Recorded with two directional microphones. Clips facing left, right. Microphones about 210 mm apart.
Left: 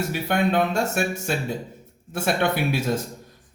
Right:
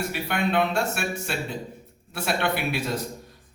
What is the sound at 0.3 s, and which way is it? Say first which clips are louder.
Speech: left 3 dB; 45° left (ahead or behind).